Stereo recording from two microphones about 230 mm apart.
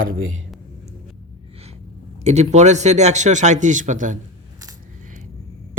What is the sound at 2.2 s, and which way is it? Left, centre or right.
Speech, right.